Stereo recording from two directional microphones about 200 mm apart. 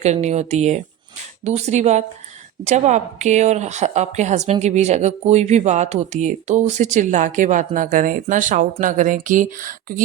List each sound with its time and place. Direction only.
0.0 s speech: 35° right (ahead or behind)